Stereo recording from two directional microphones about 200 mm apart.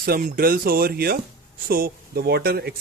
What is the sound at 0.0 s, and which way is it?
Speech, 50° right (ahead or behind).